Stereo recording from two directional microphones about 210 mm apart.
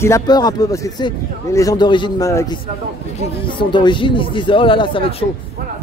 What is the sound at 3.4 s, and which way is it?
Speech, 20° left (ahead or behind).